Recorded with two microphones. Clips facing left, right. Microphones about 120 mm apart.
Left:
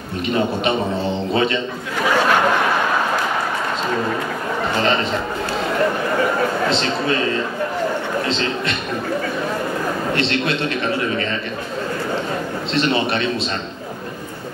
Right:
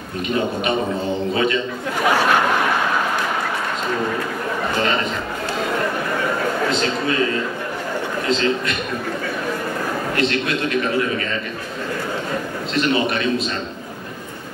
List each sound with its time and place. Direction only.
1.3 s a man's voice: 30° left (ahead or behind)
6.7 s a man's voice: 30° left (ahead or behind)
10.1 s a man's voice: 30° left (ahead or behind)
12.7 s a man's voice: 30° left (ahead or behind)